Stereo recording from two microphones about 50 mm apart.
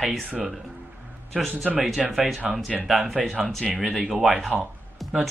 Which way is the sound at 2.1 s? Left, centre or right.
Centre.